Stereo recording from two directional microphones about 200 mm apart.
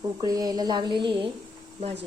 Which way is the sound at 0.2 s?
20° right (ahead or behind).